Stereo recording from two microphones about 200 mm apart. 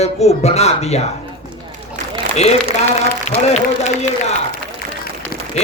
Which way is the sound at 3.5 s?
35° left (ahead or behind).